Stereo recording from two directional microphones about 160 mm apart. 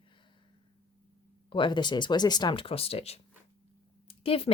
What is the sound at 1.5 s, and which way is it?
Speech, 30° left (ahead or behind).